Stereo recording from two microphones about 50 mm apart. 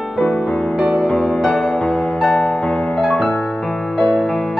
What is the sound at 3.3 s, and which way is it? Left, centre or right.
Music, centre.